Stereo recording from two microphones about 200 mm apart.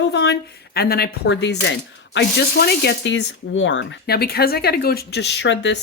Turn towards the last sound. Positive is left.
turn(degrees=65)  # may be behind; listen again after turning